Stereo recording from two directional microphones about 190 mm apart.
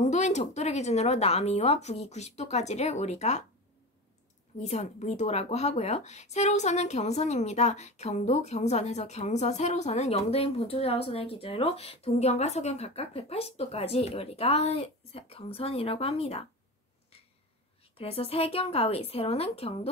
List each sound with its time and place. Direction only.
0.0 s speech: 40° left (ahead or behind)
4.6 s speech: 35° left (ahead or behind)
17.9 s speech: 30° left (ahead or behind)